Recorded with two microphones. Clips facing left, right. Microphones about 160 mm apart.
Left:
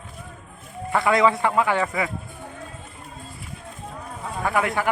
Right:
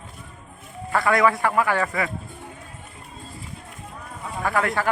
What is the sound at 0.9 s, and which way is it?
Speech, 20° left (ahead or behind).